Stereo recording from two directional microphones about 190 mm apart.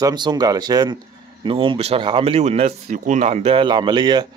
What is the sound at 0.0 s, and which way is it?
Speech, 20° right (ahead or behind).